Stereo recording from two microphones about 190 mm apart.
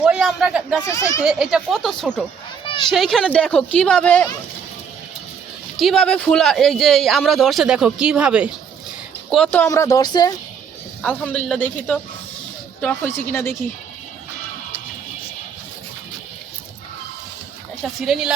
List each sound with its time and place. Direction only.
0.0 s speech: 5° right (ahead or behind)
0.9 s speech: 15° left (ahead or behind)
1.2 s speech: centre (ahead or behind)
5.7 s speech: centre (ahead or behind)
9.3 s speech: 5° left (ahead or behind)
11.0 s speech: 5° left (ahead or behind)
18.0 s speech: centre (ahead or behind)